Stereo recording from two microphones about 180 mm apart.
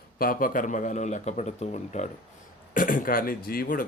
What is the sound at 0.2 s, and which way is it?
Speech, 50° left (ahead or behind).